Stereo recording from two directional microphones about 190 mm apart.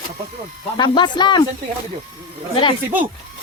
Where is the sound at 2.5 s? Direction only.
25° left (ahead or behind).